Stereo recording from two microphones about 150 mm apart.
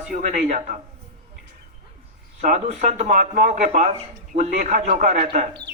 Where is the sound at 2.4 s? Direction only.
55° right (ahead or behind).